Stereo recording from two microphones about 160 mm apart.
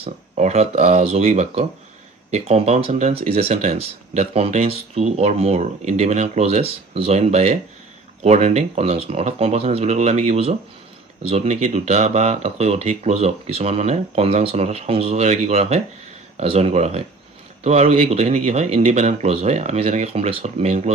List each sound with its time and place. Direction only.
0.0 s speech: 40° right (ahead or behind)